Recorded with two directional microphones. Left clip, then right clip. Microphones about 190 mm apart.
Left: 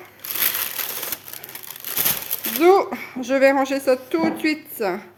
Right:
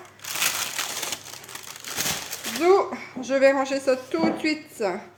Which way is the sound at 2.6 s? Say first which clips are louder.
Left 4 dB; 55° left (ahead or behind).